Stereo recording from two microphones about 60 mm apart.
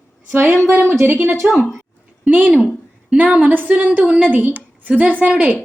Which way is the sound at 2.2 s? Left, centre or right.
Right.